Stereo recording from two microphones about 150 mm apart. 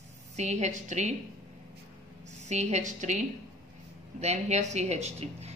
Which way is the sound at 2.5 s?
50° right (ahead or behind).